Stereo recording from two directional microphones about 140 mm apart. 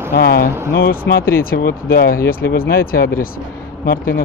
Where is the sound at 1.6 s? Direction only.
90° left.